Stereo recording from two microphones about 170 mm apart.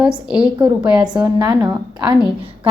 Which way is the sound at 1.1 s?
25° right (ahead or behind).